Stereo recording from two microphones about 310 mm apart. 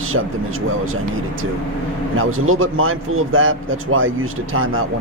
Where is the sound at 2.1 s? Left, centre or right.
Right.